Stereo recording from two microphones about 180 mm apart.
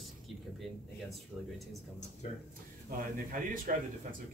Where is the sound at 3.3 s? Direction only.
50° right (ahead or behind).